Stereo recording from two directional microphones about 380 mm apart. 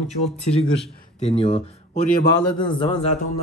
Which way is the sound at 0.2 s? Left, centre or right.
Left.